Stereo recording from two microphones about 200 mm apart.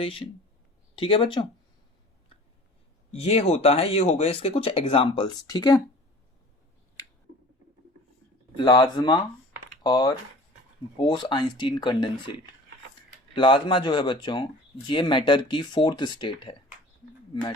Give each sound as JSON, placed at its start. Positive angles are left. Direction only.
{"t": 0.0, "sound": "speech", "side_deg": 25}
{"t": 3.1, "sound": "speech", "side_deg": 30}
{"t": 8.5, "sound": "speech", "side_deg": 20}
{"t": 13.3, "sound": "speech", "side_deg": 25}